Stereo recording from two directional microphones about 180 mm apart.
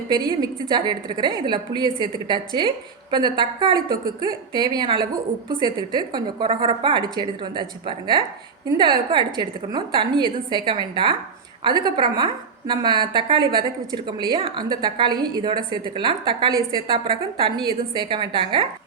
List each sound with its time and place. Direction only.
0.1 s a woman's voice: 25° right (ahead or behind)